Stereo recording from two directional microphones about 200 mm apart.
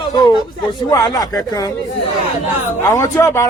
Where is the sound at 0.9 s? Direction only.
15° left (ahead or behind).